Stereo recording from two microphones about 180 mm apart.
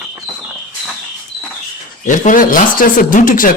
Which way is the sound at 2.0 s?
45° left (ahead or behind).